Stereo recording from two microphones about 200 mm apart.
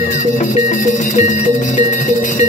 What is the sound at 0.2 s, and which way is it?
Music, 40° left (ahead or behind).